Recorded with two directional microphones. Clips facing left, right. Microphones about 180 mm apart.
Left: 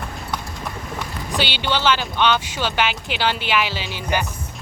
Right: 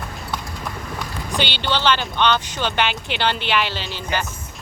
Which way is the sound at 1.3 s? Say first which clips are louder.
Even; 5° left (ahead or behind).